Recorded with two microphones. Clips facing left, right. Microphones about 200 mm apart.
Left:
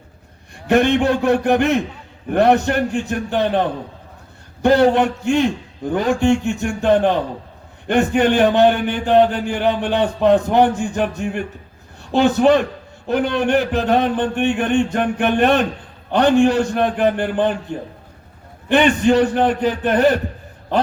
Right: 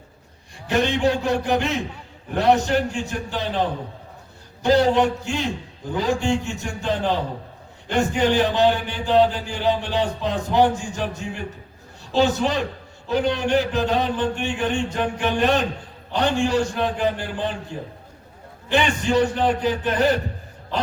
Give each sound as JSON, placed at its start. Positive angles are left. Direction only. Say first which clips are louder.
{"t": 0.7, "sound": "a man's voice", "louder": "left 5 dB", "side_deg": 55}
{"t": 18.7, "sound": "a man's voice", "louder": "left 6 dB", "side_deg": 55}